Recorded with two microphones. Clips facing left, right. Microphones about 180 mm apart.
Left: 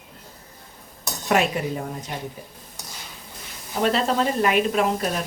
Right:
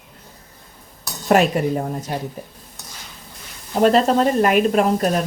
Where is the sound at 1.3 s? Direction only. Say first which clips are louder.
Right 6 dB; 45° right (ahead or behind).